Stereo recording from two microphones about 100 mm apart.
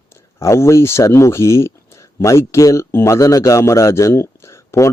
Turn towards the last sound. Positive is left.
turn(degrees=30)  # may be behind; listen again after turning